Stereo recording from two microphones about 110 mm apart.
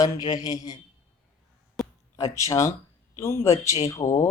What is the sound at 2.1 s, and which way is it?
Speech, 30° left (ahead or behind).